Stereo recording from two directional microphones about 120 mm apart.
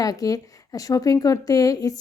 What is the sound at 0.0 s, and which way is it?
A woman's voice, 30° left (ahead or behind).